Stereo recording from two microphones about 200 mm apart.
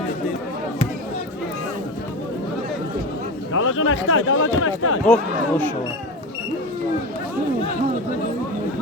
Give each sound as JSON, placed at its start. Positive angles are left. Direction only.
{"t": 3.5, "sound": "speech", "side_deg": 90}
{"t": 5.0, "sound": "speech", "side_deg": 5}